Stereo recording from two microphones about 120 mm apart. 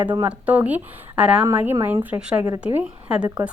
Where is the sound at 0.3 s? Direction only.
10° right (ahead or behind).